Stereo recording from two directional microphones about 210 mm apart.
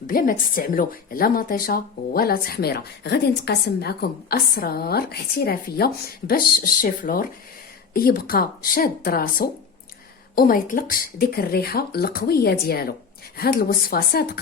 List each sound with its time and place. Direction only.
0.1 s a woman's voice: 40° left (ahead or behind)